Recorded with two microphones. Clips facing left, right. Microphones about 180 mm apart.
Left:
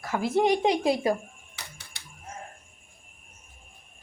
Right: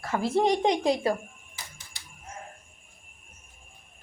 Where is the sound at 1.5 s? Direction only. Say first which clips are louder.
Left 3 dB; 65° left (ahead or behind).